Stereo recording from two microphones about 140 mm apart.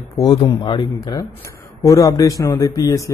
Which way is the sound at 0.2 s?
30° left (ahead or behind).